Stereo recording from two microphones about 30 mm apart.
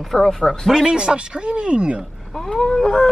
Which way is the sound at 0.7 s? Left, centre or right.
Right.